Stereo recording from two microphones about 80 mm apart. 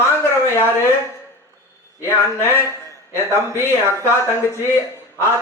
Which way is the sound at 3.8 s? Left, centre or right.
Left.